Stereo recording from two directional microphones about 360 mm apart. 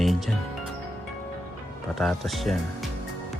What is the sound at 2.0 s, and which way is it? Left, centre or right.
Speech, centre.